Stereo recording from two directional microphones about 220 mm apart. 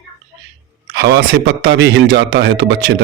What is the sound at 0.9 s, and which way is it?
A man's voice, 45° right (ahead or behind).